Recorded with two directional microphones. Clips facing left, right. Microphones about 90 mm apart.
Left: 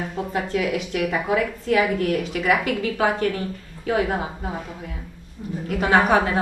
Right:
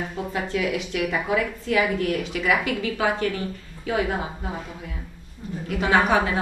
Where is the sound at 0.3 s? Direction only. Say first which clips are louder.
Left 2 dB; 45° left (ahead or behind).